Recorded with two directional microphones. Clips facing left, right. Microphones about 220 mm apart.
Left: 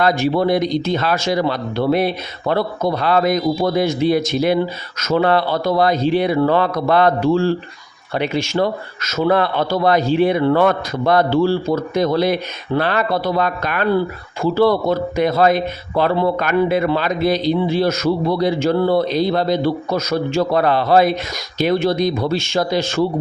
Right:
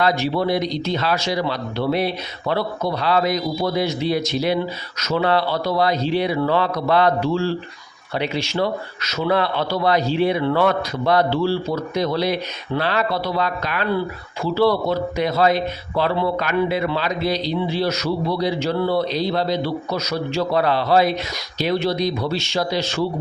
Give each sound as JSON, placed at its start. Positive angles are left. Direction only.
{"t": 0.0, "sound": "speech", "side_deg": 50}